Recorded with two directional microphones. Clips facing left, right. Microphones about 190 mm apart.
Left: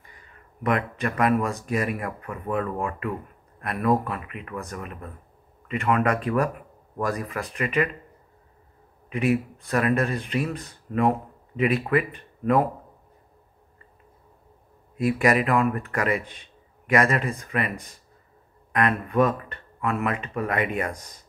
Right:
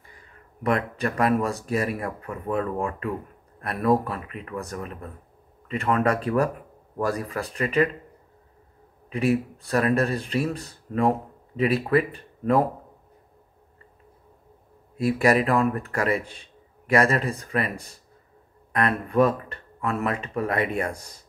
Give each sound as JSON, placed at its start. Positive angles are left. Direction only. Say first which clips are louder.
{"t": 0.7, "sound": "speech", "louder": "right 1 dB", "side_deg": -35}
{"t": 4.1, "sound": "speech", "louder": "right 1 dB", "side_deg": -35}
{"t": 9.1, "sound": "speech", "louder": "even", "side_deg": -35}
{"t": 15.0, "sound": "speech", "louder": "right 1 dB", "side_deg": -35}
{"t": 19.0, "sound": "speech", "louder": "right 1 dB", "side_deg": -35}